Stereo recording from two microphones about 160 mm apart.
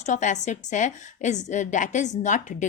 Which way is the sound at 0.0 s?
50° left (ahead or behind).